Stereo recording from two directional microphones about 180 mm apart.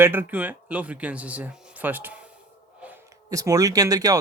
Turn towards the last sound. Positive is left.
turn(degrees=-20)  # may be behind; listen again after turning